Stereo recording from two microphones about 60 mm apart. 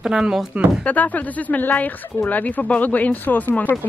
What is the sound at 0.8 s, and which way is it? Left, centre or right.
A woman's voice, left.